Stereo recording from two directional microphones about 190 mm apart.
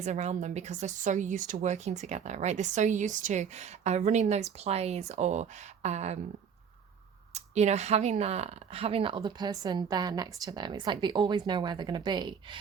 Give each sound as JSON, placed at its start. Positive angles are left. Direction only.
{"t": 0.0, "sound": "speech", "side_deg": -35}
{"t": 7.3, "sound": "speech", "side_deg": -35}